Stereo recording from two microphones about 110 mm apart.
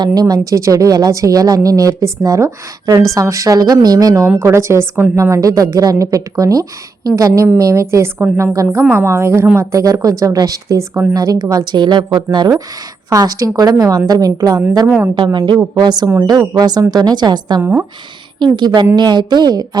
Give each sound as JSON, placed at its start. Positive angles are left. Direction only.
{"t": 0.0, "sound": "a woman's voice", "side_deg": -35}
{"t": 14.8, "sound": "a woman's voice", "side_deg": -15}
{"t": 15.1, "sound": "a woman's voice", "side_deg": -45}
{"t": 17.6, "sound": "a woman's voice", "side_deg": -20}
{"t": 18.3, "sound": "a woman's voice", "side_deg": -45}